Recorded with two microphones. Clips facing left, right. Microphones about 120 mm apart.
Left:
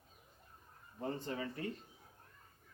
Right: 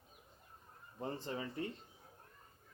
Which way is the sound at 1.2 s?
30° right (ahead or behind).